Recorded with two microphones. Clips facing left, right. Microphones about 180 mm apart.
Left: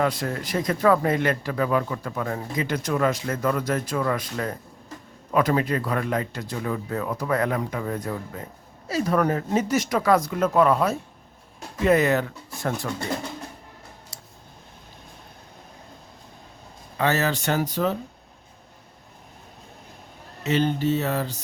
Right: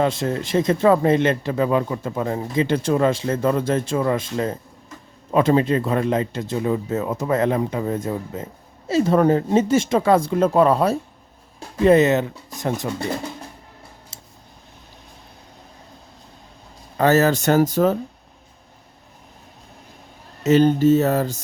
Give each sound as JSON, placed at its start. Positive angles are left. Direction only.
{"t": 0.0, "sound": "speech", "side_deg": -25}
{"t": 14.1, "sound": "a sound", "side_deg": -25}
{"t": 17.0, "sound": "speech", "side_deg": -40}
{"t": 20.4, "sound": "speech", "side_deg": -40}